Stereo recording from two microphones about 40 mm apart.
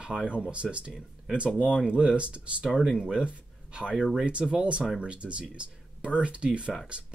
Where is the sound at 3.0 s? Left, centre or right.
Right.